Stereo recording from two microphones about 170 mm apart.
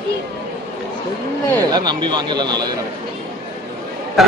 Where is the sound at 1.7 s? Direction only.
25° right (ahead or behind).